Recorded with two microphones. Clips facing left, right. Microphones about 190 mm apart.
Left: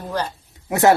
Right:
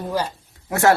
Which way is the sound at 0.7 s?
20° left (ahead or behind).